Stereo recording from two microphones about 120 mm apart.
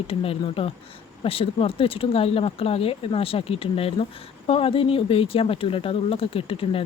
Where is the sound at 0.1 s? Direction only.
50° left (ahead or behind).